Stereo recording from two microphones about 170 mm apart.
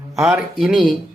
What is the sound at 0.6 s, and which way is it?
Speech, centre (ahead or behind).